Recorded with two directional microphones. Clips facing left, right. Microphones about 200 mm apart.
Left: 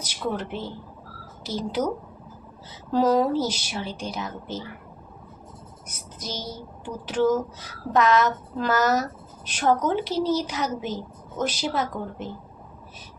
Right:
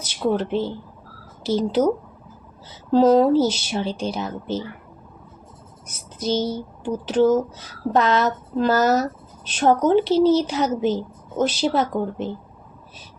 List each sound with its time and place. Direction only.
0.0 s a woman's voice: 30° right (ahead or behind)
2.9 s a woman's voice: 25° right (ahead or behind)
6.1 s a woman's voice: 30° right (ahead or behind)